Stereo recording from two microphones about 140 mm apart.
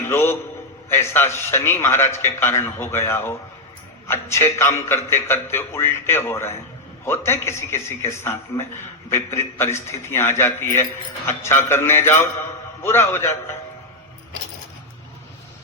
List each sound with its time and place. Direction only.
0.0 s a man's voice: 15° left (ahead or behind)